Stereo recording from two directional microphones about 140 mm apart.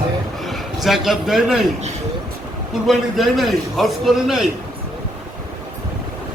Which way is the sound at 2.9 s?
Centre (ahead or behind).